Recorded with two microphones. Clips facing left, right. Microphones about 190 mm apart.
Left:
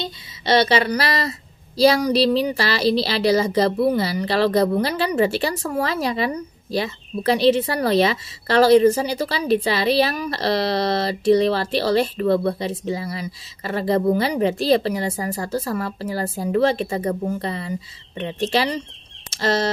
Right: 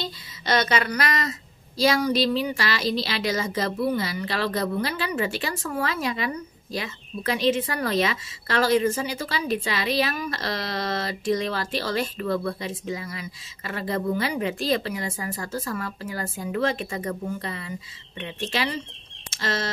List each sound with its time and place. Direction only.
0.0 s a woman's voice: 30° left (ahead or behind)